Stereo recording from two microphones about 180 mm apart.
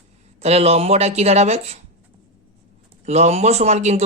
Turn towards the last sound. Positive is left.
turn(degrees=-40)  # may be behind; listen again after turning